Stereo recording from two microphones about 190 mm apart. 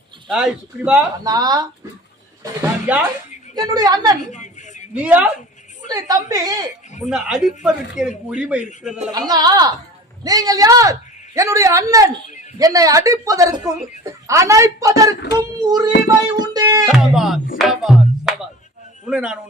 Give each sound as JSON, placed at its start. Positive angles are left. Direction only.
{"t": 0.3, "sound": "speech", "side_deg": 0}
{"t": 1.2, "sound": "a woman's voice", "side_deg": -20}
{"t": 4.3, "sound": "a sound", "side_deg": 40}
{"t": 4.9, "sound": "speech", "side_deg": -5}
{"t": 5.9, "sound": "a woman's voice", "side_deg": -20}
{"t": 7.0, "sound": "speech", "side_deg": -5}
{"t": 9.1, "sound": "a woman's voice", "side_deg": -20}
{"t": 16.3, "sound": "music", "side_deg": -20}
{"t": 16.9, "sound": "music", "side_deg": 0}
{"t": 19.0, "sound": "speech", "side_deg": -5}